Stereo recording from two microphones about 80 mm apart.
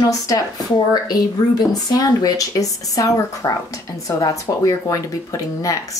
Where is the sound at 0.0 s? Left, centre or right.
Left.